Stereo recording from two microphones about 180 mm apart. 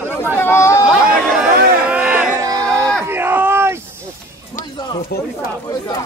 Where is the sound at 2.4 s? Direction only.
20° right (ahead or behind).